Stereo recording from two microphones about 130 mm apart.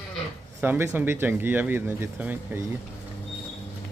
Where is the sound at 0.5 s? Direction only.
15° right (ahead or behind).